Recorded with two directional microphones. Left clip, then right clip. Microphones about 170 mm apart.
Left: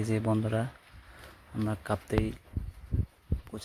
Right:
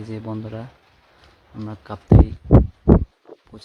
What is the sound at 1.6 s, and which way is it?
Speech, 15° left (ahead or behind).